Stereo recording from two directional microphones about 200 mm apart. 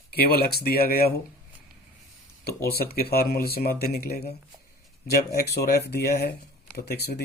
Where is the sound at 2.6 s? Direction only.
50° left (ahead or behind).